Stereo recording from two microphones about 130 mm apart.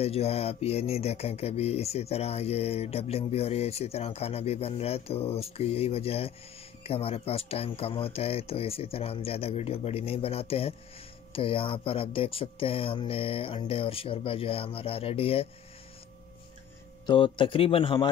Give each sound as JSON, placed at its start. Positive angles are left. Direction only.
{"t": 0.0, "sound": "speech", "side_deg": 50}
{"t": 17.0, "sound": "a man's voice", "side_deg": 40}